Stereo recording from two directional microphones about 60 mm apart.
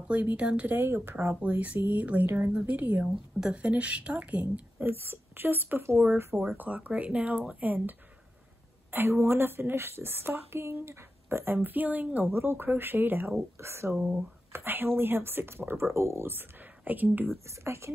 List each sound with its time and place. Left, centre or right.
0.1 s speech: right
0.7 s a woman's voice: right
1.4 s speech: right
2.2 s a woman's voice: right
3.3 s speech: centre
4.7 s a woman's voice: right
8.9 s a woman's voice: right
12.3 s a woman's voice: right
13.6 s speech: right
14.5 s a woman's voice: right
16.8 s a woman's voice: right
17.5 s speech: right